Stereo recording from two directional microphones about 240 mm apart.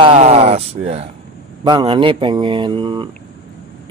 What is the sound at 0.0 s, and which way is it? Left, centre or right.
Speech, right.